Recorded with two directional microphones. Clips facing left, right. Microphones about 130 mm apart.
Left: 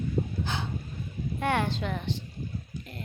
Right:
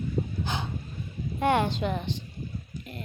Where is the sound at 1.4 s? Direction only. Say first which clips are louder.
Right 4 dB; 20° right (ahead or behind).